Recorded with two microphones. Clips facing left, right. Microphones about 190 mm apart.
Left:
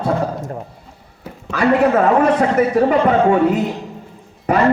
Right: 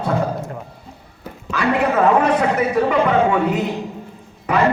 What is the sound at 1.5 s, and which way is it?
A man's voice, 50° left (ahead or behind).